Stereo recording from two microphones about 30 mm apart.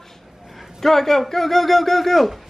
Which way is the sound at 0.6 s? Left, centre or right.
Centre.